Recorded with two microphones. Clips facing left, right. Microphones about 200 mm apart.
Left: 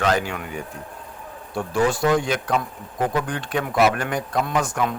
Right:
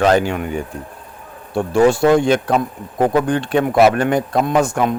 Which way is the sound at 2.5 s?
50° right (ahead or behind).